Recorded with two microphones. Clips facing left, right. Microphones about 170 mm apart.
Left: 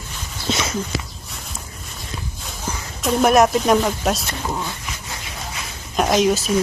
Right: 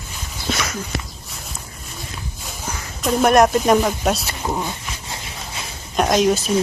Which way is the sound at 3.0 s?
Centre (ahead or behind).